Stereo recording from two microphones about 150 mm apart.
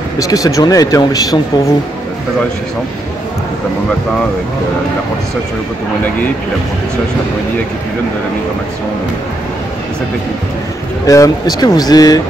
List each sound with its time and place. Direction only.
0.2 s speech: 25° left (ahead or behind)
11.1 s speech: 20° left (ahead or behind)